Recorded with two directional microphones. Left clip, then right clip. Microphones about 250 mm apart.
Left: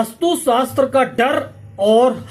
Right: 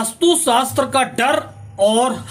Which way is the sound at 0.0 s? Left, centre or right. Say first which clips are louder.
Right 1 dB; centre.